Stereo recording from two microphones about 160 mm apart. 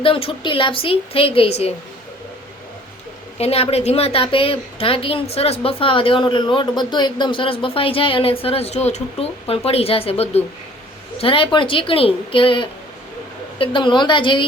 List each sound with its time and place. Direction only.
0.0 s a woman's voice: 35° left (ahead or behind)
3.3 s a woman's voice: 40° left (ahead or behind)